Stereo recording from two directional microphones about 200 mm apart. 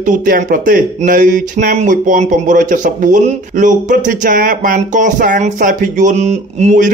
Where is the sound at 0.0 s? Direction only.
40° right (ahead or behind).